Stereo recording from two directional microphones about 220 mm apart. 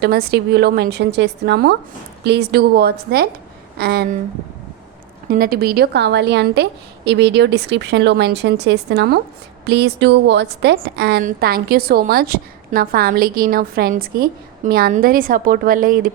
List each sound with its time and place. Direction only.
0.0 s a woman's voice: 45° right (ahead or behind)
5.3 s a woman's voice: 45° right (ahead or behind)